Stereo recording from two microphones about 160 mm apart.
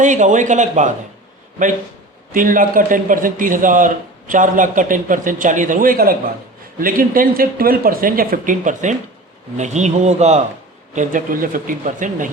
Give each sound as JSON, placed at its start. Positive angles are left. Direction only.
{"t": 0.0, "sound": "speech", "side_deg": -50}
{"t": 2.3, "sound": "a man's voice", "side_deg": -60}
{"t": 10.9, "sound": "a man's voice", "side_deg": -55}